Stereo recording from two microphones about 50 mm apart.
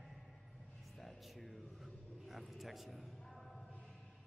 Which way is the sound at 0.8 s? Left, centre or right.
Centre.